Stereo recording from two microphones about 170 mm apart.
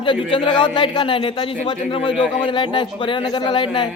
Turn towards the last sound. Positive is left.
turn(degrees=30)  # may be behind; listen again after turning